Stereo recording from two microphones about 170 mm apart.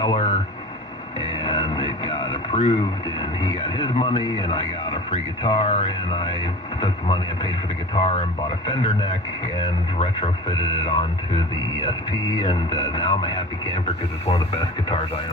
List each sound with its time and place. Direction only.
0.0 s a sound: 25° left (ahead or behind)
1.5 s radio: 30° left (ahead or behind)
3.4 s speech: 30° left (ahead or behind)